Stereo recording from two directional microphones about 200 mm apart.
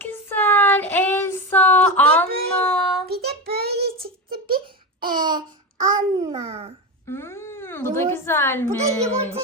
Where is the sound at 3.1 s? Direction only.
50° right (ahead or behind).